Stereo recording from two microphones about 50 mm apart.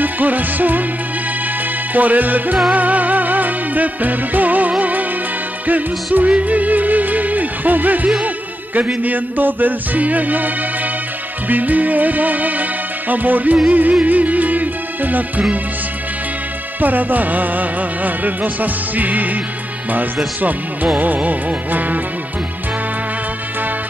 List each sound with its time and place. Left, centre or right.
0.0 s music: right
2.0 s music: right
6.1 s music: right
16.8 s music: right
21.0 s music: right